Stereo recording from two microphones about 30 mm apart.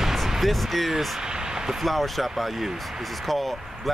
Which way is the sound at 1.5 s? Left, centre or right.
Centre.